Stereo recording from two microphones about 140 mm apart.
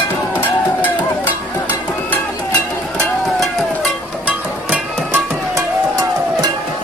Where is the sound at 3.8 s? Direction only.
10° right (ahead or behind).